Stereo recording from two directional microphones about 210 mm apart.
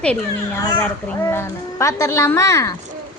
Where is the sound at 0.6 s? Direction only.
15° left (ahead or behind).